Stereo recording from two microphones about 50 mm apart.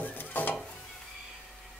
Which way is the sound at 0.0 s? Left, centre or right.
Left.